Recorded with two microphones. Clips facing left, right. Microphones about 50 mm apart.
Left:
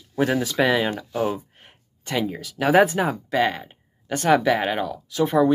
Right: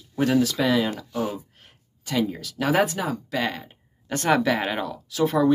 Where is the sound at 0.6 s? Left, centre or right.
Left; by 2.8 s centre.